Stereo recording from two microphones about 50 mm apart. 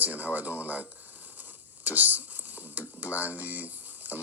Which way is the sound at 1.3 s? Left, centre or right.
Right.